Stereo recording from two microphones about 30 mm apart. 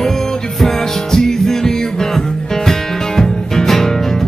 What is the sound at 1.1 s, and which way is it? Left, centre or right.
Music, centre.